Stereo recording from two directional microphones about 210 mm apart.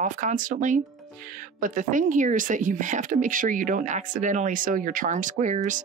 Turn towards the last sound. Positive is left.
turn(degrees=-35)  # may be behind; listen again after turning